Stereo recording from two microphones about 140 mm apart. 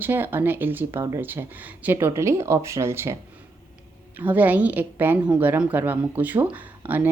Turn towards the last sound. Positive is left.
turn(degrees=-15)  # may be behind; listen again after turning